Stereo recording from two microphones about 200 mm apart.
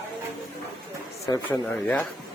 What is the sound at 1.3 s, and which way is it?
Speech, 15° left (ahead or behind).